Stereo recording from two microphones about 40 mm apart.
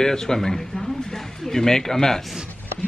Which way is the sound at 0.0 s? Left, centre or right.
Centre.